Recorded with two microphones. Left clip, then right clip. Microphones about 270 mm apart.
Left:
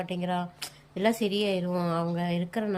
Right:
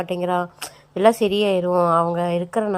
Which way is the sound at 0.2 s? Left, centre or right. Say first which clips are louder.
Right 10 dB; right.